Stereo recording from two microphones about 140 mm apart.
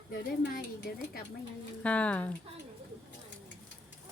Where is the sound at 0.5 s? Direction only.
90° left.